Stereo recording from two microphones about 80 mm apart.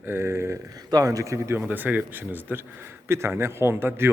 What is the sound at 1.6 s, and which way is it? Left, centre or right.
A man's voice, right.